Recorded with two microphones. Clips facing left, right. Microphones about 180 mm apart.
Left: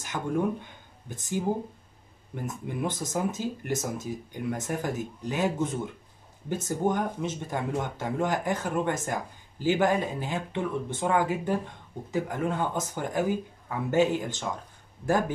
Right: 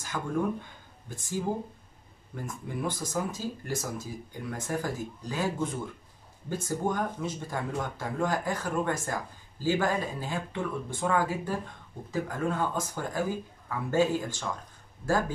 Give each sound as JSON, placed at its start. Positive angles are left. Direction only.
{"t": 0.1, "sound": "speech", "side_deg": 20}